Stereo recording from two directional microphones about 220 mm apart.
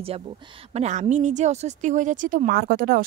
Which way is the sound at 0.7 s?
30° right (ahead or behind).